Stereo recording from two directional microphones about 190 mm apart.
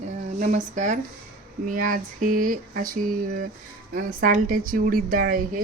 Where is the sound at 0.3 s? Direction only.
40° right (ahead or behind).